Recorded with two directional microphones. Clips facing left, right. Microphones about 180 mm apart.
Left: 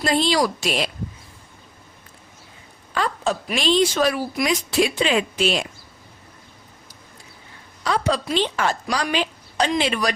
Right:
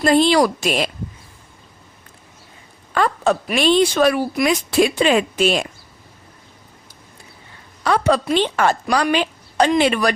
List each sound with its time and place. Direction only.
0.0 s a woman's voice: 55° right (ahead or behind)
2.9 s a woman's voice: 60° right (ahead or behind)
7.9 s a woman's voice: 60° right (ahead or behind)